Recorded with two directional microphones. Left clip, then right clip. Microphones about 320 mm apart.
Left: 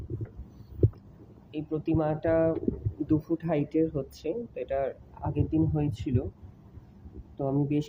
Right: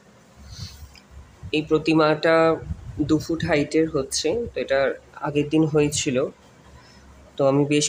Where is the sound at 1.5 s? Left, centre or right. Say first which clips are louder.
Right 11 dB; centre.